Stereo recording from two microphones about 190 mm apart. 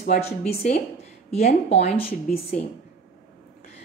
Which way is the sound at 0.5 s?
55° left (ahead or behind).